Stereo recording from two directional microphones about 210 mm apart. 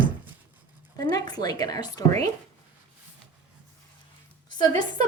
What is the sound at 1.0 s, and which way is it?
A woman's voice, 20° left (ahead or behind).